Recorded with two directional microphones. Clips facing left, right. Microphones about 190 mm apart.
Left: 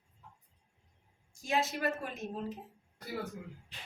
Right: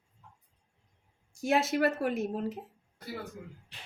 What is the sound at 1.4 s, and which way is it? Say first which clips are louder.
A woman's voice: right 6 dB; 70° right (ahead or behind).